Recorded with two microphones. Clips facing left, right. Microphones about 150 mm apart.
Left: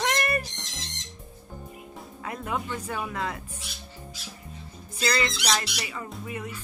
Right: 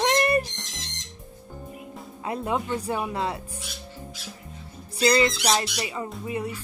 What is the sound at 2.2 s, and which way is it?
Speech, 30° right (ahead or behind).